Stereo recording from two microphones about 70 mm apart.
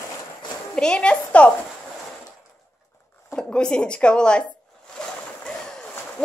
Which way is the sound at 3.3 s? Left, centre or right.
Centre.